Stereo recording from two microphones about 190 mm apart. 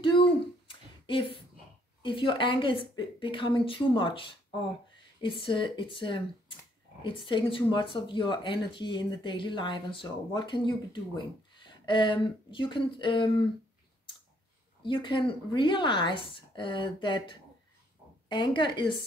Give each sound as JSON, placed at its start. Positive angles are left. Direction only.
{"t": 0.7, "sound": "a sound", "side_deg": 25}
{"t": 2.0, "sound": "speech", "side_deg": 25}
{"t": 14.8, "sound": "speech", "side_deg": 25}